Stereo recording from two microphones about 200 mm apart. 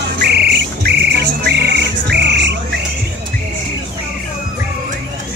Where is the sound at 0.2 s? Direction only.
55° right (ahead or behind).